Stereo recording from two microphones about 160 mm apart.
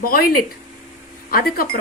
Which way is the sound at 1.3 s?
65° left (ahead or behind).